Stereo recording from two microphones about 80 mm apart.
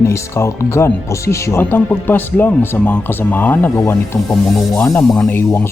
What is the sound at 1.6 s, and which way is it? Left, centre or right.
Speech, left.